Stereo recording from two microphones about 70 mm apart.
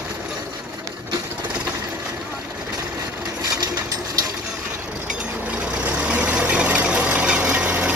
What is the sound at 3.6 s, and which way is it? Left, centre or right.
Sewing machine, right.